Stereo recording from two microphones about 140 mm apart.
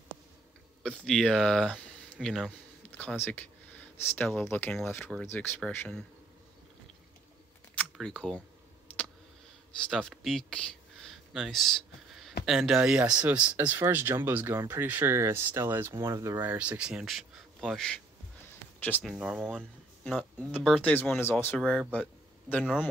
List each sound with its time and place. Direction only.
1.0 s speech: 5° left (ahead or behind)
7.7 s camera: 5° left (ahead or behind)
9.8 s speech: 5° left (ahead or behind)
19.0 s speech: 5° right (ahead or behind)
20.0 s speech: 10° left (ahead or behind)
21.9 s a sound: 10° left (ahead or behind)